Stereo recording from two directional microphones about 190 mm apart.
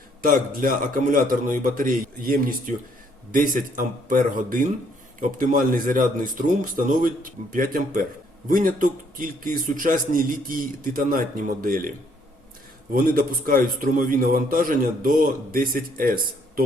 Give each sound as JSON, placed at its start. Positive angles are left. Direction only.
{"t": 0.2, "sound": "a man's voice", "side_deg": -45}